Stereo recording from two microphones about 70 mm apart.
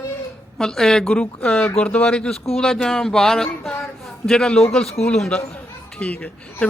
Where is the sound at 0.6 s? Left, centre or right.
Centre.